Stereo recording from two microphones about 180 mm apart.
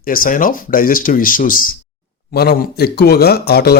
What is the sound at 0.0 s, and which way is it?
Speech, 50° left (ahead or behind).